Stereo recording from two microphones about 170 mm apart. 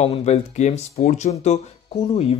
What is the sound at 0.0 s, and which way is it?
Speech, 40° left (ahead or behind).